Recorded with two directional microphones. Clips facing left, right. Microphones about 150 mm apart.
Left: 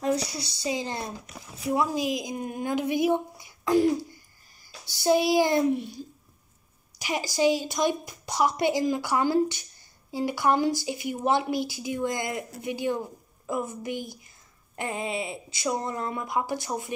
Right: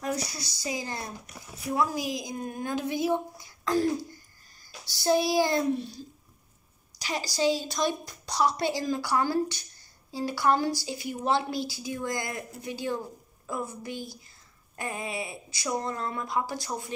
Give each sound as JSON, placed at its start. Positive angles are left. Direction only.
{"t": 0.6, "sound": "speech", "side_deg": 25}
{"t": 5.0, "sound": "speech", "side_deg": 15}
{"t": 7.0, "sound": "a sound", "side_deg": 15}
{"t": 7.3, "sound": "speech", "side_deg": 15}